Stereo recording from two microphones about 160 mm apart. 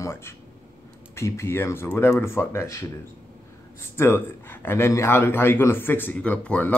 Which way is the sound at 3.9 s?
15° left (ahead or behind).